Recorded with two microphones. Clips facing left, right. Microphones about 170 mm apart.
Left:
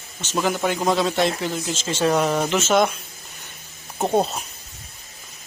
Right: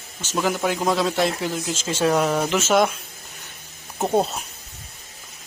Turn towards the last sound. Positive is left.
turn(degrees=5)  # may be behind; listen again after turning